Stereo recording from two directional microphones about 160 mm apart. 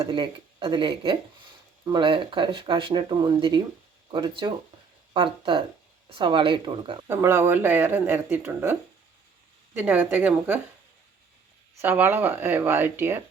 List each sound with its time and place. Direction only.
0.0 s speech: 30° right (ahead or behind)
7.1 s speech: 15° right (ahead or behind)
11.8 s speech: 15° right (ahead or behind)